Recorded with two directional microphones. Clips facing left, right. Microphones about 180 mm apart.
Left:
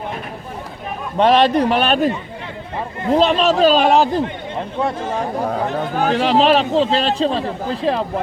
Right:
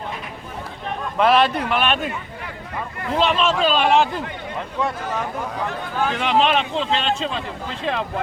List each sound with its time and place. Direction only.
1.1 s speech: 35° left (ahead or behind)
4.2 s speech: 25° left (ahead or behind)